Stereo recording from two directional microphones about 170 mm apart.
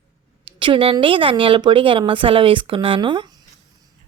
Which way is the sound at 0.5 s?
30° right (ahead or behind).